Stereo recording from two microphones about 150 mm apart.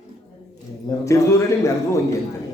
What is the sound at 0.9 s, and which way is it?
A man's voice, 20° left (ahead or behind).